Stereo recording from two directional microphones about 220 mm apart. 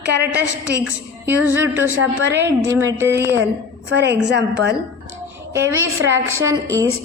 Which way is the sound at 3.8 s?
50° right (ahead or behind).